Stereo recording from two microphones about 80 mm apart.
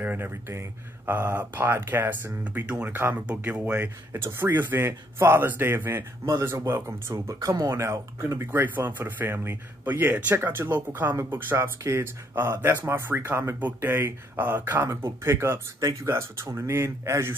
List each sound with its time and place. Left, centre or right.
0.0 s speech: right